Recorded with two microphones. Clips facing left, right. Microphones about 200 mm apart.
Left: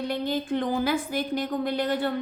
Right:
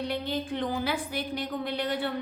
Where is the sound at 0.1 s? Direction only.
45° left (ahead or behind).